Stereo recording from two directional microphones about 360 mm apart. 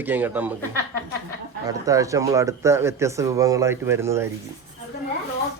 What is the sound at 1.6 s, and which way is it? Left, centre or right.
Speech, centre.